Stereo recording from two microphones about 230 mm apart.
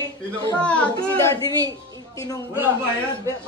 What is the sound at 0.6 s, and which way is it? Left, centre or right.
Speech, centre.